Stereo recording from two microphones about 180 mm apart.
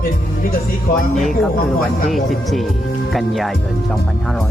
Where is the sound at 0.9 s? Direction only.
55° left (ahead or behind).